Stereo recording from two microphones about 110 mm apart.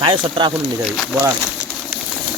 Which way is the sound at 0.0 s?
50° right (ahead or behind).